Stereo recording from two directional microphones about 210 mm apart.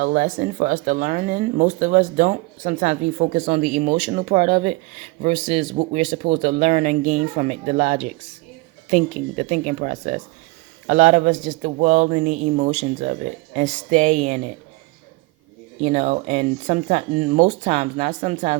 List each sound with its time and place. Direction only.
0.0 s speech: 40° right (ahead or behind)
15.8 s speech: 30° right (ahead or behind)